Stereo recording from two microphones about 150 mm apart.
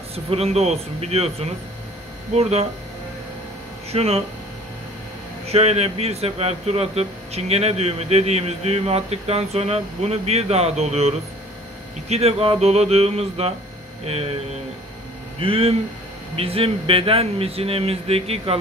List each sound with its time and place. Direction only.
0.1 s speech: 40° right (ahead or behind)
3.9 s speech: 45° right (ahead or behind)
5.5 s speech: 45° right (ahead or behind)
15.4 s speech: 40° right (ahead or behind)